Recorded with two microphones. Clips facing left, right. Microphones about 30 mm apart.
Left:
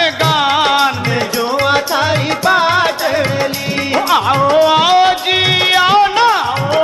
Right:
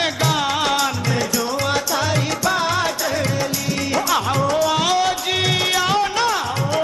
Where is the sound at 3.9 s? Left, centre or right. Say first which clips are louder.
Left 8 dB; left.